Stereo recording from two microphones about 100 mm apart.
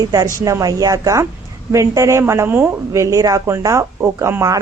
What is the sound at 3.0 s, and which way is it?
A woman's voice, 35° right (ahead or behind).